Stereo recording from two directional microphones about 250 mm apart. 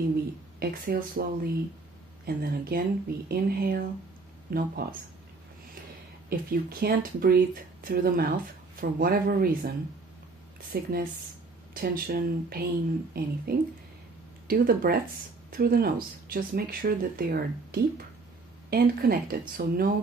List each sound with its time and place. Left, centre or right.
0.6 s speech: right
6.3 s speech: right
10.7 s speech: right
14.5 s speech: right